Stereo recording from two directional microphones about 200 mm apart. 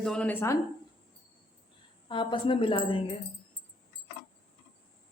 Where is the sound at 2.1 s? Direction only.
25° left (ahead or behind).